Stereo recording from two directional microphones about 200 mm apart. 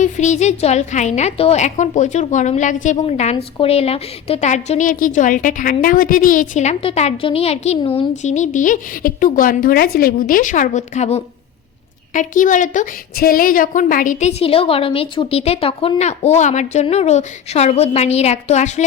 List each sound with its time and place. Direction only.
0.0 s a woman's voice: 35° left (ahead or behind)